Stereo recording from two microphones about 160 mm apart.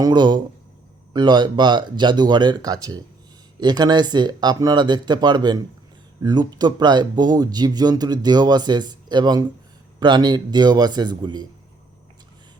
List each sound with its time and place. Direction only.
0.0 s speech: 30° right (ahead or behind)